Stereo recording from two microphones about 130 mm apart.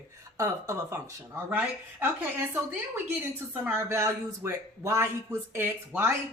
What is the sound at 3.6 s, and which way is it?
A man's voice, 15° right (ahead or behind).